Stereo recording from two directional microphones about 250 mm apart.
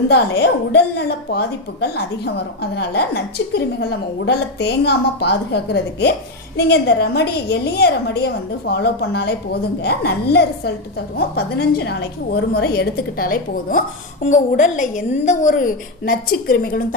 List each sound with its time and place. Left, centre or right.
0.1 s a woman's voice: left